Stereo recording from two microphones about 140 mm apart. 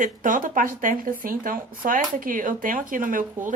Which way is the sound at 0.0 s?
70° right (ahead or behind).